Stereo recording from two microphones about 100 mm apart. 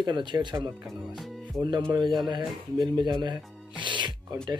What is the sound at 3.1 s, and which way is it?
Music, 50° right (ahead or behind).